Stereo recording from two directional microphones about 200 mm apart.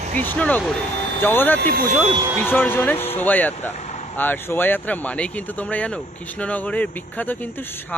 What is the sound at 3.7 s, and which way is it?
Vehicle, 35° left (ahead or behind).